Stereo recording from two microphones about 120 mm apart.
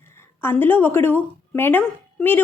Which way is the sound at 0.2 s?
20° left (ahead or behind).